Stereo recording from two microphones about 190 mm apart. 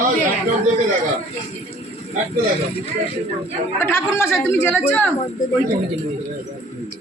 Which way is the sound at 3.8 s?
10° left (ahead or behind).